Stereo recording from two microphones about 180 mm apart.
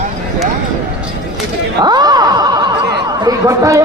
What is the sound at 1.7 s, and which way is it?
Snicker, 25° right (ahead or behind).